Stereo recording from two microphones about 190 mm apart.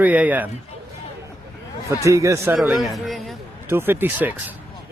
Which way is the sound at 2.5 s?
Centre (ahead or behind).